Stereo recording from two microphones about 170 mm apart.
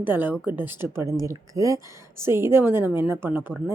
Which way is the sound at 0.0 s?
10° right (ahead or behind).